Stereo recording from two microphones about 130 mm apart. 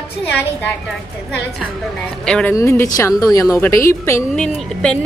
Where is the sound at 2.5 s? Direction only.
20° left (ahead or behind).